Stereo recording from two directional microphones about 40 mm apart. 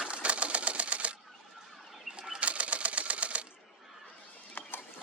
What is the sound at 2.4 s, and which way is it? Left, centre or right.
Typewriter, right.